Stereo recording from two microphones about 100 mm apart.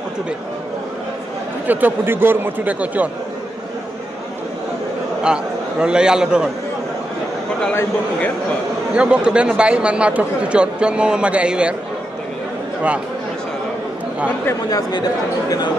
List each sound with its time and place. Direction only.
1.7 s a man's voice: 20° right (ahead or behind)
5.2 s a man's voice: 10° right (ahead or behind)
8.9 s a man's voice: 10° right (ahead or behind)
14.7 s speech: 45° left (ahead or behind)